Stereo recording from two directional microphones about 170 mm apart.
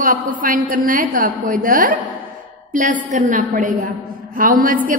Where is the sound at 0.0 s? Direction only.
55° right (ahead or behind).